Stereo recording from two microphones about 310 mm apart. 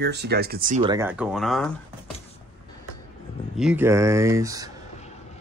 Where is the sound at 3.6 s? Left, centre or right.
Centre.